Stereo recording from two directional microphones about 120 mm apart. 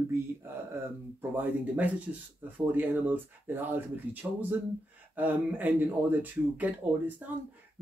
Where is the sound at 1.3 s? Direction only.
15° right (ahead or behind).